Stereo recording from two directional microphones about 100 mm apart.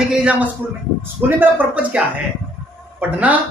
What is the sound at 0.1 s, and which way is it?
A man's voice, 10° right (ahead or behind).